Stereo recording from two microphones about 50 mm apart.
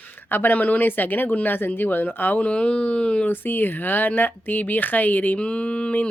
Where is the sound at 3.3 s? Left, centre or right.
Left.